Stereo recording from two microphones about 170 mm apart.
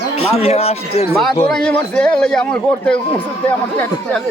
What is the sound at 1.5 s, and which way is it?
A man's voice, 5° left (ahead or behind).